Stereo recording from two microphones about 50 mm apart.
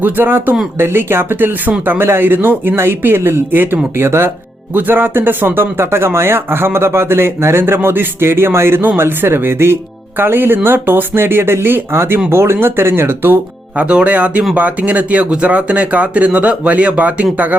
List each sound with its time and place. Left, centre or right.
0.0 s speech: right
2.7 s speech: right
3.9 s speech: right
4.7 s speech: right
13.7 s speech: right